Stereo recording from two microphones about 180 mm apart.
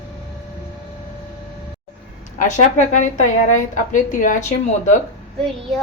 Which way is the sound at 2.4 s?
40° left (ahead or behind).